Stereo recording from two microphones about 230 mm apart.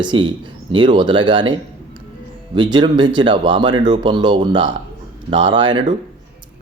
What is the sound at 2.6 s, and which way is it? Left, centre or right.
Speech, centre.